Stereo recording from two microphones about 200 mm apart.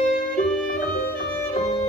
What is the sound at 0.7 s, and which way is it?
Music, 45° left (ahead or behind).